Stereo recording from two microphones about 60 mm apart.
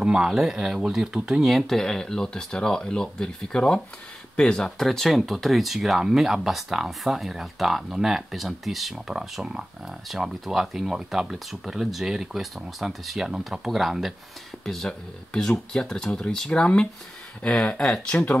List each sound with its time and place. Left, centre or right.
0.0 s speech: centre
1.4 s speech: centre; by 18.4 s left